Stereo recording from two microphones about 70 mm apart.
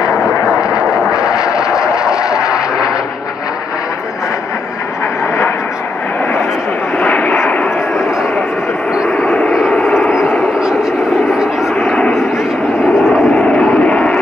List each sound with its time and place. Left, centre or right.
0.7 s vehicle: centre
1.5 s a sound: centre
9.1 s vehicle: centre
13.5 s vehicle: centre